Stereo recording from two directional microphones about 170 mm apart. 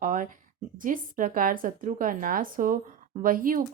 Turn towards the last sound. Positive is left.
turn(degrees=-55)  # may be behind; listen again after turning